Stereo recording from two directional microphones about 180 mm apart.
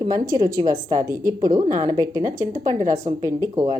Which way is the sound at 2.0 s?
20° right (ahead or behind).